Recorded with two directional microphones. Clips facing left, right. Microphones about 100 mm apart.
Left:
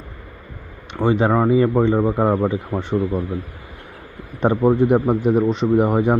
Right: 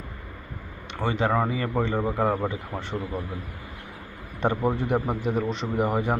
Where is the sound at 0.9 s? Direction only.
20° left (ahead or behind).